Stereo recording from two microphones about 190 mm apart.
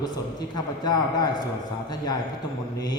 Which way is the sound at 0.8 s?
20° left (ahead or behind).